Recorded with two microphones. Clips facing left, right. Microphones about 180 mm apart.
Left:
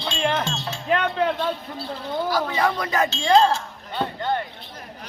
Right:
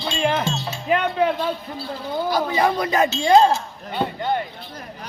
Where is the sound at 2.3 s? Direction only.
20° right (ahead or behind).